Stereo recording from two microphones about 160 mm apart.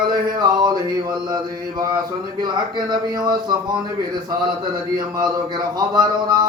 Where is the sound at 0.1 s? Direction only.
25° right (ahead or behind).